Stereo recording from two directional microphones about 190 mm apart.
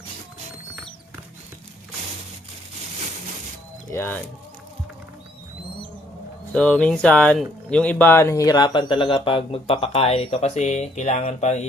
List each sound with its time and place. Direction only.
3.9 s speech: 10° left (ahead or behind)
6.5 s speech: 5° left (ahead or behind); by 11.6 s 35° left (ahead or behind)